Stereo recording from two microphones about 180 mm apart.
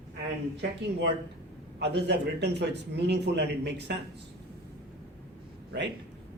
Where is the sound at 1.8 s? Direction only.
70° right (ahead or behind).